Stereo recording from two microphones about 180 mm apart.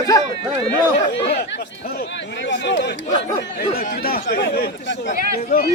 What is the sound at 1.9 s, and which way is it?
Speech, 70° left (ahead or behind).